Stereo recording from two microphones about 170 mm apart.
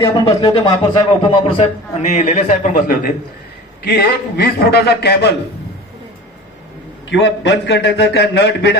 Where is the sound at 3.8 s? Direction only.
70° left (ahead or behind).